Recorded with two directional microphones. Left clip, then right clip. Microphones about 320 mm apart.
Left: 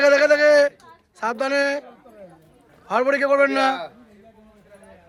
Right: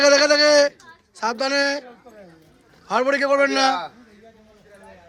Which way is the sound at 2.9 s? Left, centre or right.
Centre.